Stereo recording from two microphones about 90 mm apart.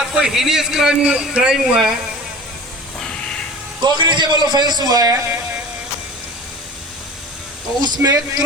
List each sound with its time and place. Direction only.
0.1 s a man's voice: 5° right (ahead or behind)
3.8 s a man's voice: 60° right (ahead or behind); by 5.2 s 45° right (ahead or behind)
7.8 s a man's voice: 50° right (ahead or behind)